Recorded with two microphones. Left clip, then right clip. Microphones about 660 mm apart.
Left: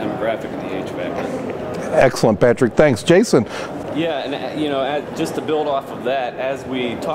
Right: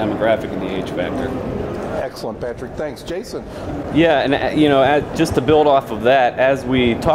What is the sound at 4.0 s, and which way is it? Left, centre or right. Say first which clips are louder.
Speech: right 8 dB; right.